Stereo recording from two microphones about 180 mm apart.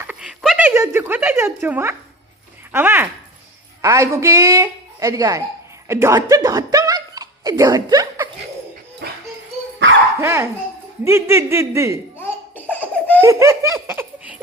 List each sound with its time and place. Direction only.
0.1 s a sound: 5° right (ahead or behind)
2.7 s a woman's voice: 10° right (ahead or behind)
9.0 s a sound: 65° right (ahead or behind)
10.2 s a woman's voice: 15° right (ahead or behind)
12.1 s laughter: 10° left (ahead or behind)
13.2 s laughter: 15° right (ahead or behind)